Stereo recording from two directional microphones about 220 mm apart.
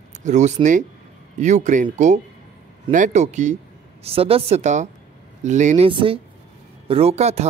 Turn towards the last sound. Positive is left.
turn(degrees=-30)  # may be behind; listen again after turning